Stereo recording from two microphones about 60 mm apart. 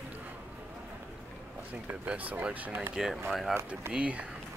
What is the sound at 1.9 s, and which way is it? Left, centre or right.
Speech, right.